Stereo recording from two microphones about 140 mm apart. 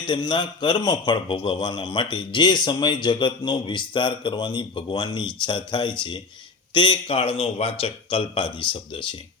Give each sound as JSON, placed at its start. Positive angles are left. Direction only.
{"t": 0.0, "sound": "a man's voice", "side_deg": 35}